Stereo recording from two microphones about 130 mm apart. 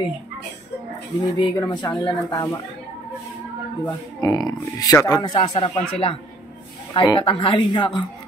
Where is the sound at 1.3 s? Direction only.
35° left (ahead or behind).